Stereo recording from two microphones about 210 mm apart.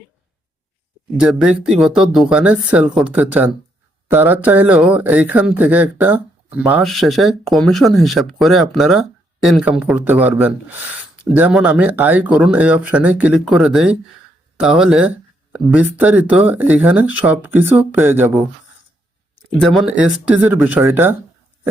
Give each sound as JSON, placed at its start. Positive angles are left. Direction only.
{"t": 1.1, "sound": "speech", "side_deg": -5}
{"t": 19.5, "sound": "speech", "side_deg": 0}